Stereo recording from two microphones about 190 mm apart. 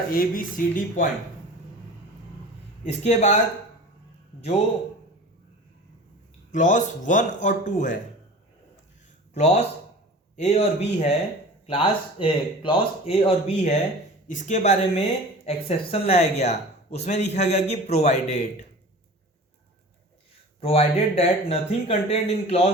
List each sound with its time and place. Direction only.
0.1 s speech: 45° left (ahead or behind)
2.8 s speech: 35° left (ahead or behind)
4.4 s speech: 35° left (ahead or behind)
6.5 s speech: 40° left (ahead or behind)
9.3 s speech: 35° left (ahead or behind)
20.6 s speech: 30° left (ahead or behind)